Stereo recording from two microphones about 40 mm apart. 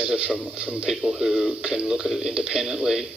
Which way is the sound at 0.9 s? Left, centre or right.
Centre.